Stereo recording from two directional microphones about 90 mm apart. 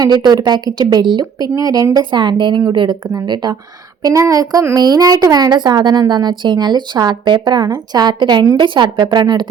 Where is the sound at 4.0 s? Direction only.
35° right (ahead or behind).